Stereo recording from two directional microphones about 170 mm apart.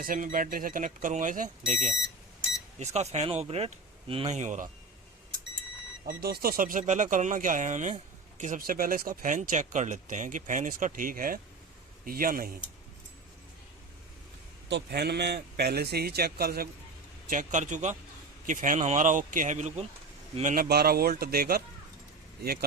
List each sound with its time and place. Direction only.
0.0 s speech: 55° right (ahead or behind)
6.2 s speech: 60° right (ahead or behind)
14.7 s a man's voice: 80° right
17.2 s speech: 50° right (ahead or behind)